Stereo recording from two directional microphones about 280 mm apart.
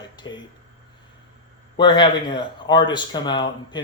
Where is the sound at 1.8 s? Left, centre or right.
Centre.